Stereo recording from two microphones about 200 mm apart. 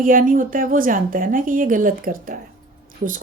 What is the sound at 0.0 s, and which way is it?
Speech, 45° right (ahead or behind).